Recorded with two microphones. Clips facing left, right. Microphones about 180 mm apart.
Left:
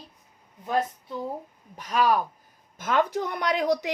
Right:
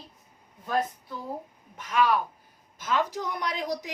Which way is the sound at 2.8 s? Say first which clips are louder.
Left 4 dB; 55° left (ahead or behind).